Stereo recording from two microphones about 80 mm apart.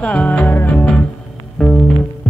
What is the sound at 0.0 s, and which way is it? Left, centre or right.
Music, centre.